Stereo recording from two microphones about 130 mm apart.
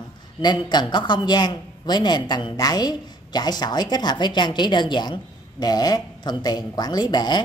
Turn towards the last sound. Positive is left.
turn(degrees=35)  # may be behind; listen again after turning